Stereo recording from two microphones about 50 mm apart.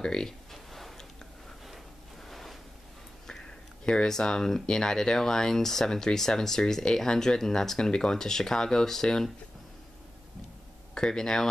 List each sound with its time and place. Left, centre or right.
0.0 s speech: centre
0.5 s a sound: centre
3.3 s speech: centre
11.0 s speech: centre